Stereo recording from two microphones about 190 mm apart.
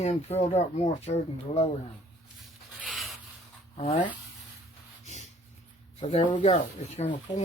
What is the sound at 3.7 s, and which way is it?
Speech, 30° left (ahead or behind).